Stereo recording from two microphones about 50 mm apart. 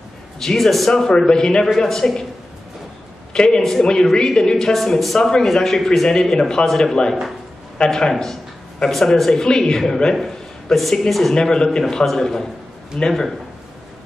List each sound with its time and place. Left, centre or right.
0.4 s speech: centre
3.3 s a man's voice: centre
11.3 s speech: centre